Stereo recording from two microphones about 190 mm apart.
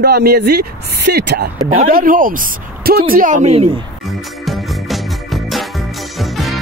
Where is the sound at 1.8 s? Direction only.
50° right (ahead or behind); by 3.8 s 30° right (ahead or behind).